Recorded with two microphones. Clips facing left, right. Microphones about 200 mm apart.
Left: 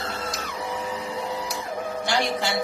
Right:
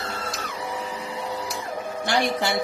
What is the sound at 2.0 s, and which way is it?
Speech, 55° right (ahead or behind).